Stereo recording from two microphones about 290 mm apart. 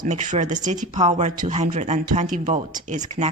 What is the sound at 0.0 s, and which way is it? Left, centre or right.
Speech, right.